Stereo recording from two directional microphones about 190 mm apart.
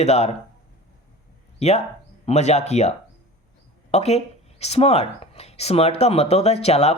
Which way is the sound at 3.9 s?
35° left (ahead or behind).